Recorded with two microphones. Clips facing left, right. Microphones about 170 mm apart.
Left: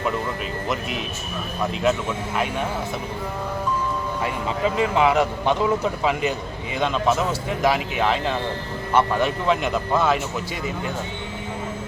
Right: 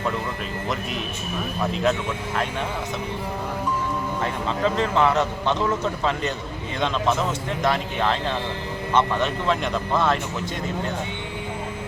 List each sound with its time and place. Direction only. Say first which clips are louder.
1.7 s speech: left 2 dB; 5° left (ahead or behind)
4.2 s speech: even; 10° left (ahead or behind)